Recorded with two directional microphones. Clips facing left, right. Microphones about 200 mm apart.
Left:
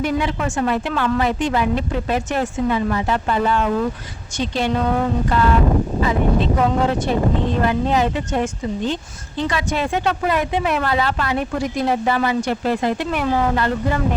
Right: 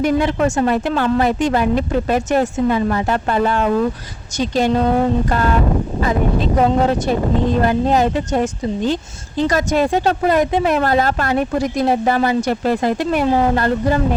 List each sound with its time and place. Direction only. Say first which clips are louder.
0.0 s a woman's voice: right 5 dB; 45° right (ahead or behind)